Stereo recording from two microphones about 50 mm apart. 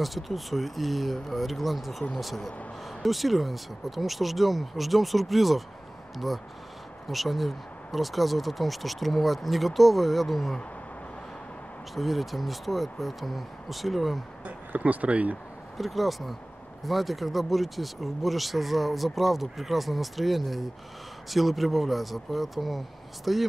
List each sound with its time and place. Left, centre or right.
0.0 s speech: centre
11.9 s speech: centre
14.4 s speech: right
15.8 s speech: centre